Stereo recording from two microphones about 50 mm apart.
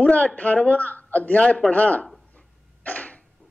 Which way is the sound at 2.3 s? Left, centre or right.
Left.